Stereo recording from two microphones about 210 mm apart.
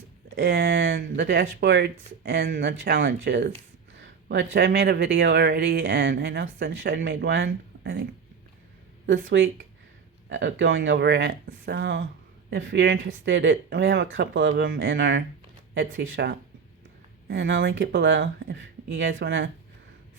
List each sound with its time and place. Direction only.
0.3 s speech: 55° right (ahead or behind)
9.0 s speech: 65° right (ahead or behind)